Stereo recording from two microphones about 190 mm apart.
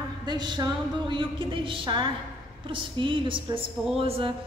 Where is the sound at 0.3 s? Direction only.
20° right (ahead or behind).